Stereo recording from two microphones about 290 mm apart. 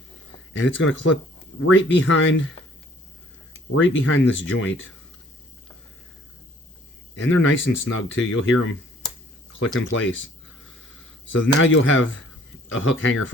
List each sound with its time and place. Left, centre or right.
0.5 s speech: left
3.7 s speech: left
7.2 s speech: left
11.3 s speech: left